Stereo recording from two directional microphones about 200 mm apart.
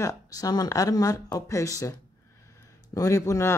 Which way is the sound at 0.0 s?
15° left (ahead or behind).